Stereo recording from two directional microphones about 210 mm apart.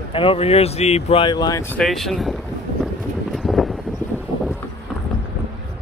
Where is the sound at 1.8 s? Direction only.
Centre (ahead or behind).